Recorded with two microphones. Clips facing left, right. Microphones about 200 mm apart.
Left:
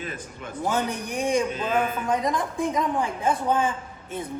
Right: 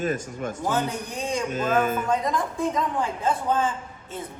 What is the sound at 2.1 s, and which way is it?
A woman's voice, 15° left (ahead or behind).